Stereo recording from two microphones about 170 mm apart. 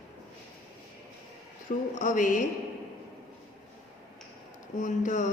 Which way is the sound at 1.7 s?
50° left (ahead or behind).